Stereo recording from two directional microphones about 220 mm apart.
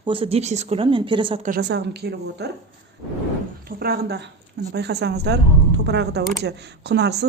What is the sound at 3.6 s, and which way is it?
A woman's voice, 45° right (ahead or behind).